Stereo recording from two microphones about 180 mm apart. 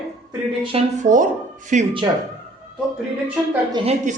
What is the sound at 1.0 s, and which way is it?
Speech, 45° right (ahead or behind).